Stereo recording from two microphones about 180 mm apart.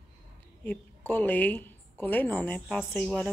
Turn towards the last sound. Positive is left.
turn(degrees=5)  # may be behind; listen again after turning